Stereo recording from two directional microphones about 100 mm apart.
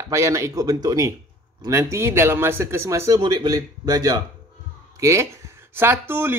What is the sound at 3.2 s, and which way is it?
Speech, 45° right (ahead or behind).